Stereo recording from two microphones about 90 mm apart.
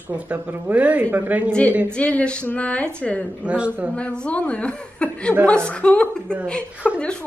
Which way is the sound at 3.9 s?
15° left (ahead or behind).